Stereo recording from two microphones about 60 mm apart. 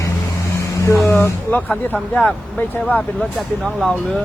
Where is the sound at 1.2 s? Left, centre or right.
Left.